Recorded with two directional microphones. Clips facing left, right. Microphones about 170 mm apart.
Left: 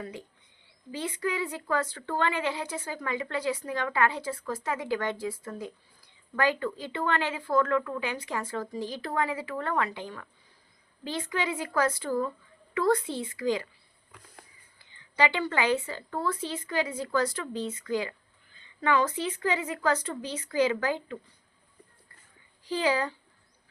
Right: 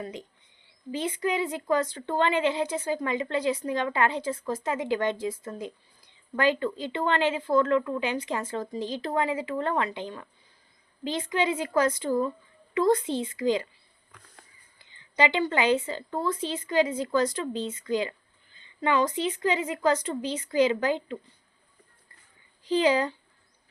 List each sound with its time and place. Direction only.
0.0 s a woman's voice: 20° right (ahead or behind)
14.8 s a woman's voice: 20° right (ahead or behind)
22.6 s a woman's voice: 20° right (ahead or behind)